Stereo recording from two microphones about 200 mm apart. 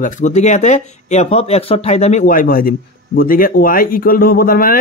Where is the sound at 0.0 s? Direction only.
35° left (ahead or behind).